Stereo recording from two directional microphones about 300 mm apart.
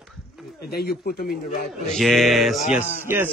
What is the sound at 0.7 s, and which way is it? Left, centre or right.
Speech, left.